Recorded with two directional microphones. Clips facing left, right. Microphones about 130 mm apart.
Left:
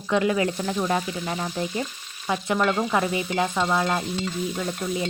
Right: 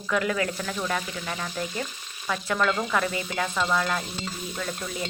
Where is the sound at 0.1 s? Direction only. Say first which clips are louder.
Left 4 dB; 25° left (ahead or behind).